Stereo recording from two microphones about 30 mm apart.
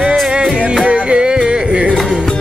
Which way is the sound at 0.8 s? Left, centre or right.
Right.